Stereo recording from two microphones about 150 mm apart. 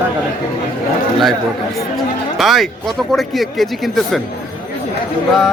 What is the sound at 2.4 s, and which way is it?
Speech, centre (ahead or behind).